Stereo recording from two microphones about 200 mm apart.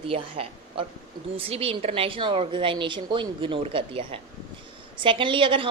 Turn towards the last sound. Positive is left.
turn(degrees=-25)  # may be behind; listen again after turning